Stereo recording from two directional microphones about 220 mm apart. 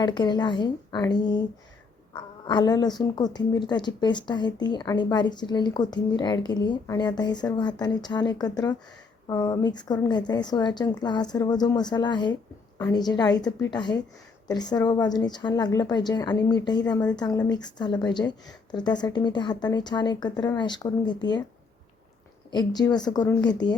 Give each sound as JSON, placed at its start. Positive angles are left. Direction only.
{"t": 0.0, "sound": "a woman's voice", "side_deg": 20}
{"t": 22.5, "sound": "a woman's voice", "side_deg": 20}